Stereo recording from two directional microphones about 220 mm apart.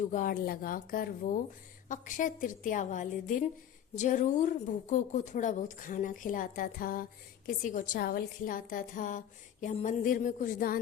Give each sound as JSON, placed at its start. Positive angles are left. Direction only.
{"t": 0.1, "sound": "a woman's voice", "side_deg": 40}